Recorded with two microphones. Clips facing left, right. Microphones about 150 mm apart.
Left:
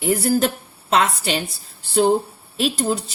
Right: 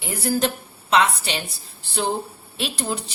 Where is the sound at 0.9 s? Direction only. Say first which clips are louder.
Left 1 dB; 40° left (ahead or behind).